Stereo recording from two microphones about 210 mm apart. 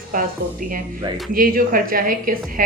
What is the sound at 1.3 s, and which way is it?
A woman's voice, 45° right (ahead or behind).